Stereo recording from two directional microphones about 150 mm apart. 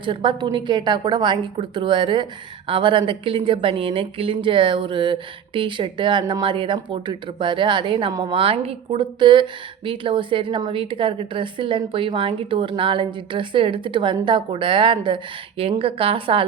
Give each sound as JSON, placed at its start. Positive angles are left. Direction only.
{"t": 0.0, "sound": "speech", "side_deg": -35}